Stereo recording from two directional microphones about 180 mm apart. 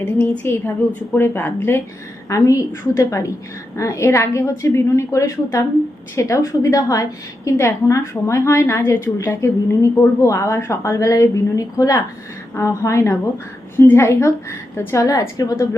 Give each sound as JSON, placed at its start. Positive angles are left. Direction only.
{"t": 0.0, "sound": "a woman's voice", "side_deg": 10}